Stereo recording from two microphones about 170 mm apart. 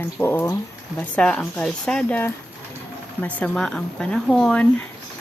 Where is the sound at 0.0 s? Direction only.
15° left (ahead or behind).